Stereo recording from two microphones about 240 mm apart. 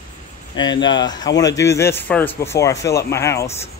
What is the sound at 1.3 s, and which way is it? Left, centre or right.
Speech, centre.